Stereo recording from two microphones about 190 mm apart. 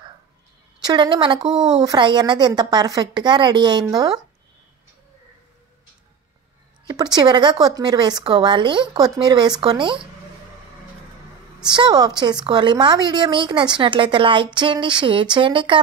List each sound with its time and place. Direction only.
0.8 s speech: 25° right (ahead or behind)
6.9 s speech: 20° right (ahead or behind)
11.6 s speech: 25° right (ahead or behind)